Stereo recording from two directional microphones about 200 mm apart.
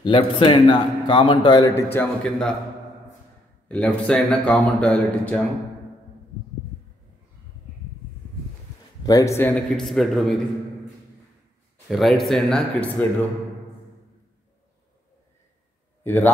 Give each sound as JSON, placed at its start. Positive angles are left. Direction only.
{"t": 0.0, "sound": "a man's voice", "side_deg": 25}
{"t": 3.6, "sound": "speech", "side_deg": 5}
{"t": 9.0, "sound": "a man's voice", "side_deg": 20}
{"t": 9.4, "sound": "speech", "side_deg": 0}
{"t": 11.9, "sound": "speech", "side_deg": 0}
{"t": 16.0, "sound": "speech", "side_deg": 10}